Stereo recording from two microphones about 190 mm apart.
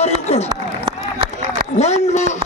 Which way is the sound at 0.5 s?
25° right (ahead or behind).